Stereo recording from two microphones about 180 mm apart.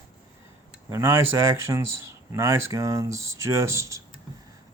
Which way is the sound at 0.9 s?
15° right (ahead or behind).